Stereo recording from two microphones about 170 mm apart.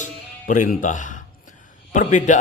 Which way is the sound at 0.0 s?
50° left (ahead or behind).